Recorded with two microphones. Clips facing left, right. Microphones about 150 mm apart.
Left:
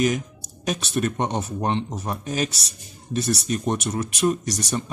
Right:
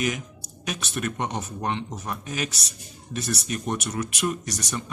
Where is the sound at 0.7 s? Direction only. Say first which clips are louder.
Left 6 dB; 30° left (ahead or behind).